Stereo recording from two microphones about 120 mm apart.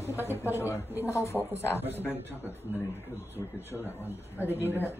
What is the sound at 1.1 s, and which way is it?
Speech, 25° left (ahead or behind).